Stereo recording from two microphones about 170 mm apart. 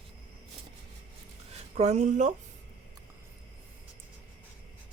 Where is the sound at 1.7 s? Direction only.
40° right (ahead or behind).